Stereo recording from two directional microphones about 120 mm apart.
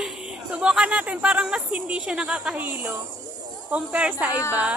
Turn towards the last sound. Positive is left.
turn(degrees=-10)  # may be behind; listen again after turning